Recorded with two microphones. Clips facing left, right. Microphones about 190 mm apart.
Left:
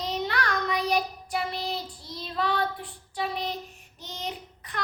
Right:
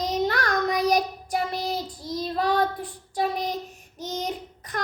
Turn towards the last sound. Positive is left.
turn(degrees=-45)  # may be behind; listen again after turning